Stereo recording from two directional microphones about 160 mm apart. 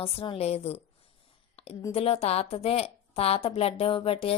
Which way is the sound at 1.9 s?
35° left (ahead or behind).